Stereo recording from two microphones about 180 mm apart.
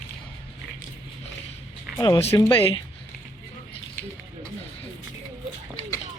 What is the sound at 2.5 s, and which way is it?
Speech, 30° left (ahead or behind).